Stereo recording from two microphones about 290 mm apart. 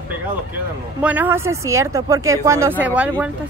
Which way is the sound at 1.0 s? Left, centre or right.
Centre.